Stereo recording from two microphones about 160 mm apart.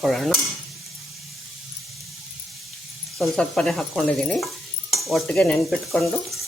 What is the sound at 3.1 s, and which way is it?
Speech, 5° left (ahead or behind).